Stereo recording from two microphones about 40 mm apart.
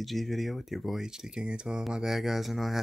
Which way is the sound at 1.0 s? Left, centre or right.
Centre.